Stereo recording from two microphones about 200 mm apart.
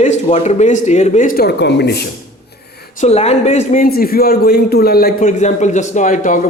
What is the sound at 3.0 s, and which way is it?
A man's voice, 30° left (ahead or behind).